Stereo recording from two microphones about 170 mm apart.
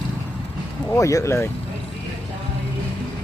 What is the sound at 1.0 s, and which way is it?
Speech, 20° left (ahead or behind).